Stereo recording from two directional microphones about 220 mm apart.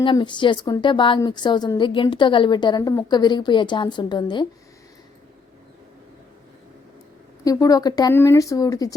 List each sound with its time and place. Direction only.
0.0 s a woman's voice: 20° left (ahead or behind)
7.4 s speech: 15° left (ahead or behind)